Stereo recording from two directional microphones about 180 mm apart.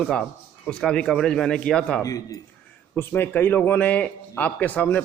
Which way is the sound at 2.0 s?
20° left (ahead or behind).